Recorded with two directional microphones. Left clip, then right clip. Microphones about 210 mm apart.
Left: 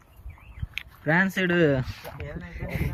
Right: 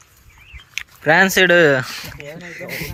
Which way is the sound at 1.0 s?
30° right (ahead or behind).